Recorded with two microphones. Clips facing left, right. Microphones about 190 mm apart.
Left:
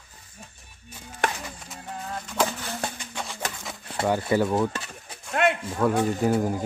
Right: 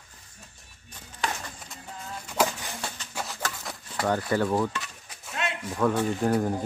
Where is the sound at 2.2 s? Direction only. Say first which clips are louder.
Right 1 dB; 10° right (ahead or behind).